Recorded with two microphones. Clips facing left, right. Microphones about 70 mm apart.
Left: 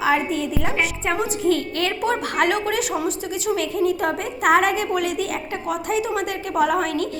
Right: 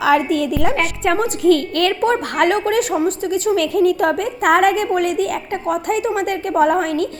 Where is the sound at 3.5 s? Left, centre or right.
Right.